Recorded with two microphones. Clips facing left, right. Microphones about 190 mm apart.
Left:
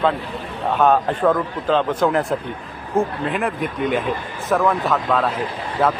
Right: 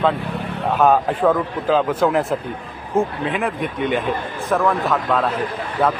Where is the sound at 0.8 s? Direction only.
5° right (ahead or behind).